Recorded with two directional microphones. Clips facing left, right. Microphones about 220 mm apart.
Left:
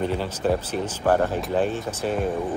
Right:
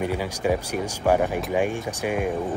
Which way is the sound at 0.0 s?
10° right (ahead or behind).